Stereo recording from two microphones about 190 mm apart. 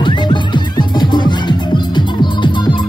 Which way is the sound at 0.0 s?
25° left (ahead or behind).